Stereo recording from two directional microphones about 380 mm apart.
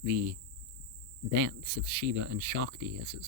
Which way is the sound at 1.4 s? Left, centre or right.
Right.